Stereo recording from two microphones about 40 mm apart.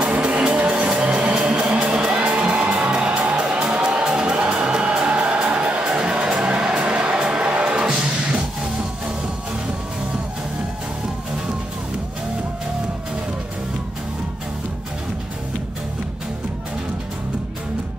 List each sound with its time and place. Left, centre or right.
0.0 s music: right
2.6 s music: right